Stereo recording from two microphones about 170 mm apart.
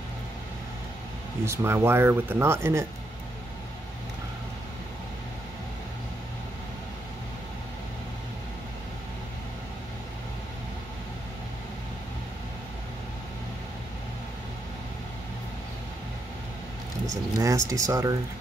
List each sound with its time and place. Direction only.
1.4 s speech: 15° right (ahead or behind)
17.4 s speech: 20° right (ahead or behind)